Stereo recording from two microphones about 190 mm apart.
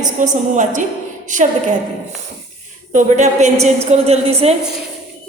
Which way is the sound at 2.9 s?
40° right (ahead or behind).